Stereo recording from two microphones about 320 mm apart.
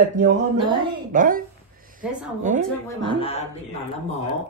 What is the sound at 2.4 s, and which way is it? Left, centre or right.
Speech, right.